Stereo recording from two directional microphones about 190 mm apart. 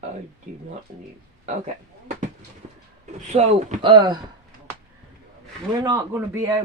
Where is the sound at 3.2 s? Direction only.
35° right (ahead or behind).